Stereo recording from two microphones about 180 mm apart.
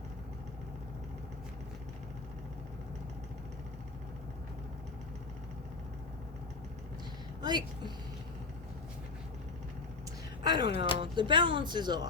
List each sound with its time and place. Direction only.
7.4 s speech: 25° right (ahead or behind)
10.4 s speech: 25° right (ahead or behind)